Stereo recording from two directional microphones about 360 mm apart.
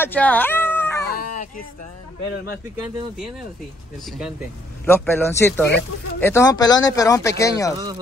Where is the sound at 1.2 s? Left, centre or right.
Left.